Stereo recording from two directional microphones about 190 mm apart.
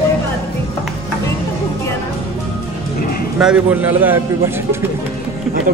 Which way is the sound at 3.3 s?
5° right (ahead or behind).